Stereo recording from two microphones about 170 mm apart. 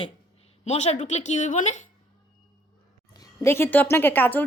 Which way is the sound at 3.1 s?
20° left (ahead or behind).